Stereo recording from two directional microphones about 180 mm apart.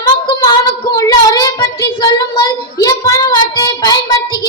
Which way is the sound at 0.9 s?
20° left (ahead or behind).